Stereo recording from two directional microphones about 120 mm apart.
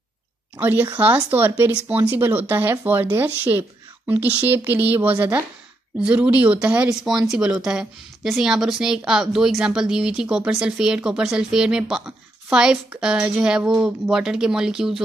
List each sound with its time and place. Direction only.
0.6 s a woman's voice: 15° right (ahead or behind)